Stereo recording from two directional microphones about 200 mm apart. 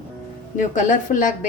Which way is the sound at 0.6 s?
40° left (ahead or behind).